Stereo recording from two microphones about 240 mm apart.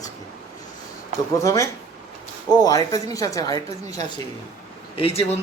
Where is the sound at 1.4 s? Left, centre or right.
Centre.